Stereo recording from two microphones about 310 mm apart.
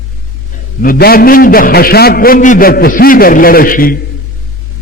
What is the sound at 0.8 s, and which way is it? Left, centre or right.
A man's voice, left.